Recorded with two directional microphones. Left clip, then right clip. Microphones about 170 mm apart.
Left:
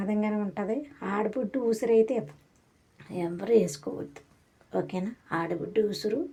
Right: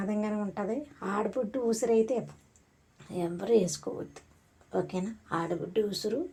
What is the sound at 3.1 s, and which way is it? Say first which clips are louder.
Speech: left 2 dB; 20° left (ahead or behind).